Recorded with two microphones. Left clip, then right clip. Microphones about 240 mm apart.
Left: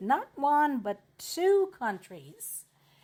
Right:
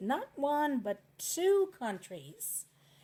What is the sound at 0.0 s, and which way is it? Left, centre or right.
Speech, left.